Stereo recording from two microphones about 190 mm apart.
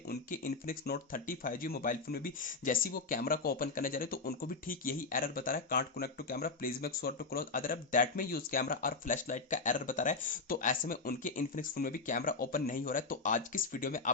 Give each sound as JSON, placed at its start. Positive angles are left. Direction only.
{"t": 0.1, "sound": "speech", "side_deg": 45}